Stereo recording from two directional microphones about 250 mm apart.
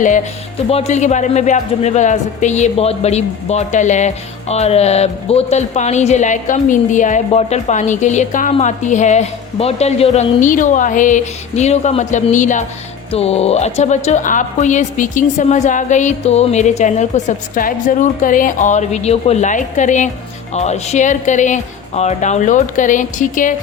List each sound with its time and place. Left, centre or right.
0.7 s a man's voice: left